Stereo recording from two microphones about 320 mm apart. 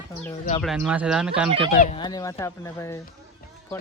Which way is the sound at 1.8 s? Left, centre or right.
Centre.